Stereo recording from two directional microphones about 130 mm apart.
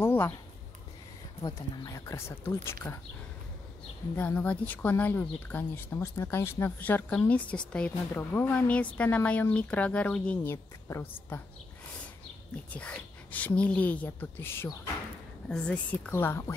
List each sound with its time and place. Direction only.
0.0 s a sound: 15° left (ahead or behind)
1.4 s speech: 25° left (ahead or behind)
4.2 s speech: 15° left (ahead or behind)
12.7 s speech: 10° left (ahead or behind)